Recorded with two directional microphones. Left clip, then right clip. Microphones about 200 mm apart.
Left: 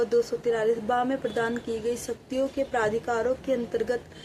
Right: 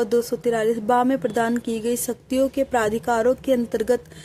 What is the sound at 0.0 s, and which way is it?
A woman's voice, 50° right (ahead or behind).